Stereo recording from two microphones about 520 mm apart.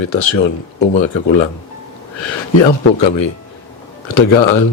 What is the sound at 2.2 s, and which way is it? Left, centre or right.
Speech, left.